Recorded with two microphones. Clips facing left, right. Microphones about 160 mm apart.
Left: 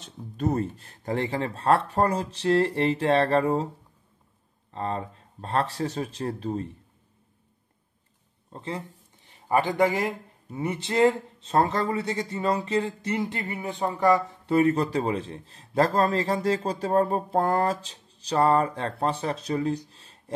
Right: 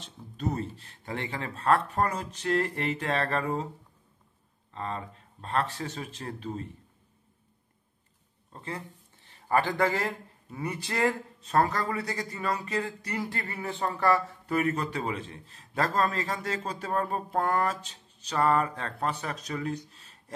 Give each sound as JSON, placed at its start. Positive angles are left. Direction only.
{"t": 0.0, "sound": "a man's voice", "side_deg": 50}
{"t": 4.6, "sound": "a man's voice", "side_deg": 35}
{"t": 8.5, "sound": "speech", "side_deg": 25}
{"t": 14.4, "sound": "a man's voice", "side_deg": 30}